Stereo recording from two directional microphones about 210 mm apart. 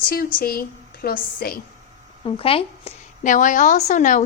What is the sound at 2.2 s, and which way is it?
A woman's voice, 25° left (ahead or behind).